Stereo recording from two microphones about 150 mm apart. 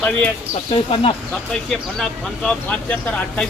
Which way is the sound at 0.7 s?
40° left (ahead or behind).